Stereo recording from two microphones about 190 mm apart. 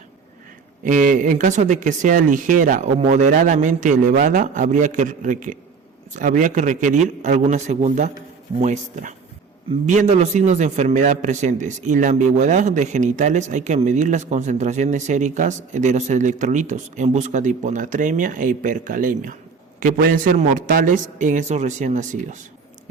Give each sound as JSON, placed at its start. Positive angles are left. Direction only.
{"t": 0.9, "sound": "a man's voice", "side_deg": -45}